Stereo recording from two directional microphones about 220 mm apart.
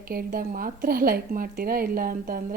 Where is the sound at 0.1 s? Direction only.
40° right (ahead or behind).